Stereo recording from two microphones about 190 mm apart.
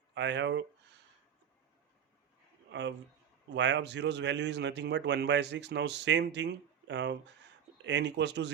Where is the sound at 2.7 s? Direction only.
70° right (ahead or behind).